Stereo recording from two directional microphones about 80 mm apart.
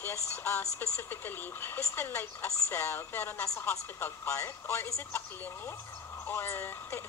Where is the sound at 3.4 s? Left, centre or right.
Left.